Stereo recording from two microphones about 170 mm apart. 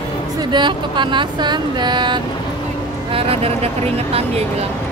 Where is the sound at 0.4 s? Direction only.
25° right (ahead or behind).